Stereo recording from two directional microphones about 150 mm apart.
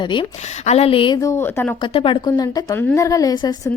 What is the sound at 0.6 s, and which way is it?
Speech, 45° left (ahead or behind).